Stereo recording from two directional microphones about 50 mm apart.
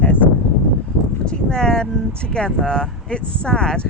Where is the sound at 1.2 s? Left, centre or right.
Centre.